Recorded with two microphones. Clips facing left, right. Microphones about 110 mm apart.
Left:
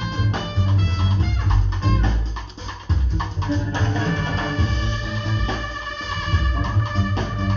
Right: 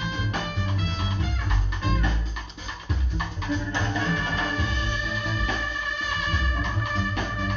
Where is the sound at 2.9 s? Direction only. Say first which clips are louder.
Left 4 dB; 30° left (ahead or behind).